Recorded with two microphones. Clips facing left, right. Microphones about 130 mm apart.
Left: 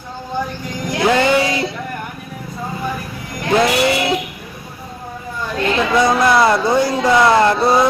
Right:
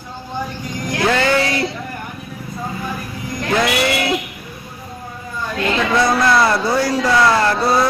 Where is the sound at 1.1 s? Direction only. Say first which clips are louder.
Left 2 dB; 15° left (ahead or behind).